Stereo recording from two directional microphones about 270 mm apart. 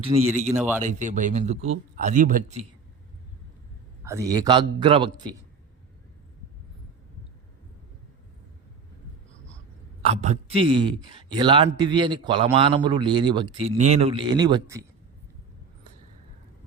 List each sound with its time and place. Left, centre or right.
0.0 s a man's voice: right
4.0 s a man's voice: centre
10.1 s a man's voice: right